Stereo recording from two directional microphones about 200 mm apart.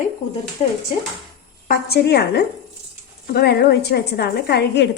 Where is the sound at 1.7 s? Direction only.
50° left (ahead or behind).